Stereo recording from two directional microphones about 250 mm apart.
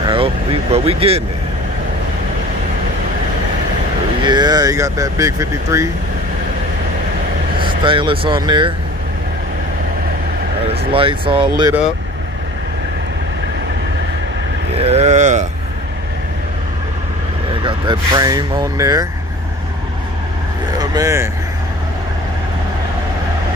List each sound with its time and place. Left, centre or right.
0.0 s speech: right
4.2 s speech: centre
7.8 s speech: centre
10.9 s speech: right
14.8 s speech: right
17.6 s speech: centre
20.7 s speech: centre